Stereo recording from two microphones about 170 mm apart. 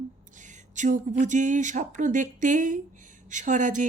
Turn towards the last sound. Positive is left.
turn(degrees=-50)  # may be behind; listen again after turning